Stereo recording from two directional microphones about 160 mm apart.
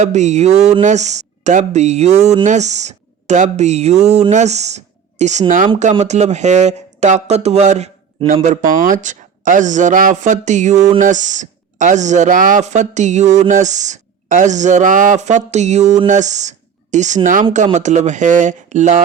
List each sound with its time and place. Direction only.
0.0 s speech: 45° right (ahead or behind)
8.3 s speech: 55° right (ahead or behind)